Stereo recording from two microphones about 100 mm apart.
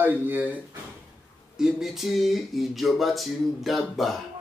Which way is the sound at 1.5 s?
5° right (ahead or behind).